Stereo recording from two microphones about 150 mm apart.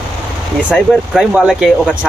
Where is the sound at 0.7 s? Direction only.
5° left (ahead or behind).